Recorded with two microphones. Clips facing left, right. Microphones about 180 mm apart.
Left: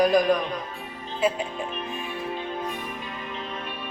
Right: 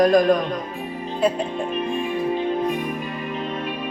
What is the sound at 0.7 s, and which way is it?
Music, 20° right (ahead or behind).